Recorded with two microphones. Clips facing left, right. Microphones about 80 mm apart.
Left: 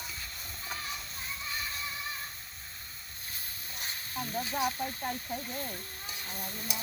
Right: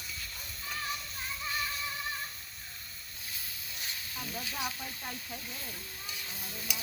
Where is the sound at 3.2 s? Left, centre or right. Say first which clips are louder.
Even; left.